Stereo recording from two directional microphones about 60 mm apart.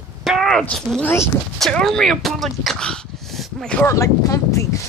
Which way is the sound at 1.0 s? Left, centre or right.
Left.